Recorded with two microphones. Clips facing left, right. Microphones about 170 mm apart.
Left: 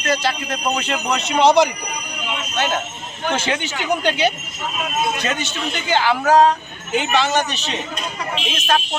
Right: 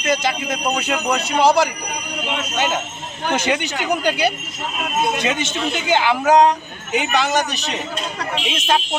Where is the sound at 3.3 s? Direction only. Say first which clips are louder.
Right 2 dB; 15° right (ahead or behind).